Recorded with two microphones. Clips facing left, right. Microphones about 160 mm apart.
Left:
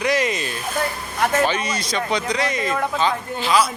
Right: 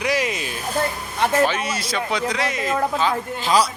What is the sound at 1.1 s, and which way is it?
Speech, 25° right (ahead or behind).